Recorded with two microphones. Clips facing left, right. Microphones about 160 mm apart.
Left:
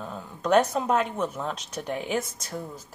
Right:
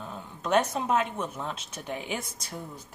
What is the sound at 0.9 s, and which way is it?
Speech, 5° right (ahead or behind).